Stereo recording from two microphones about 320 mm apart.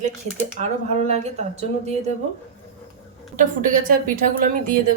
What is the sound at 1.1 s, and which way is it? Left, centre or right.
Speech, centre.